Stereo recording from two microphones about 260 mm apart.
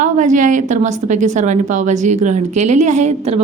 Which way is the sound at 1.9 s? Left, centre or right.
Right.